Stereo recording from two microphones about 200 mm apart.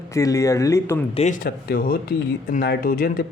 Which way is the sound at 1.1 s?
35° left (ahead or behind).